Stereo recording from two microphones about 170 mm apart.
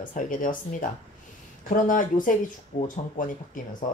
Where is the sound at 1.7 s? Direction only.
50° left (ahead or behind).